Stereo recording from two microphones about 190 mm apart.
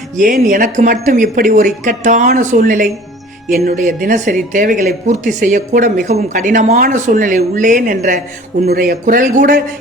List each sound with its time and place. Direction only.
0.2 s speech: 45° right (ahead or behind)
3.5 s a woman's voice: 55° right (ahead or behind)